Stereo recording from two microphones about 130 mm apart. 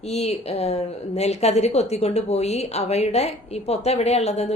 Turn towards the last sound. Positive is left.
turn(degrees=55)  # may be behind; listen again after turning